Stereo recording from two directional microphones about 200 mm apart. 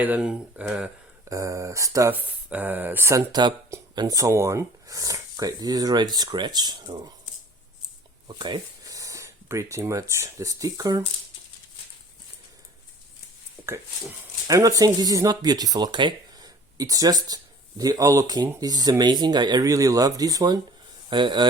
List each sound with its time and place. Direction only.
0.0 s speech: 5° right (ahead or behind); by 7.1 s 20° right (ahead or behind)
8.3 s speech: 20° right (ahead or behind)
13.6 s a sound: 10° right (ahead or behind)
14.4 s speech: 15° right (ahead or behind)